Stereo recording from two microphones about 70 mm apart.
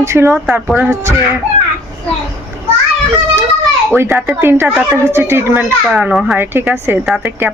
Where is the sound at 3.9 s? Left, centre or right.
Right.